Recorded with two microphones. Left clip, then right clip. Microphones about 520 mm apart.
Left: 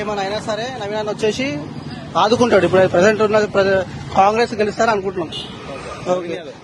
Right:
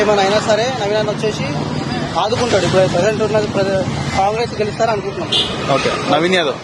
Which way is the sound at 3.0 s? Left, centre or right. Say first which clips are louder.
Left 1 dB; left.